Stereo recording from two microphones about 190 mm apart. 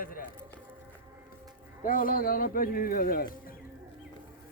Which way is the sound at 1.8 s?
45° left (ahead or behind).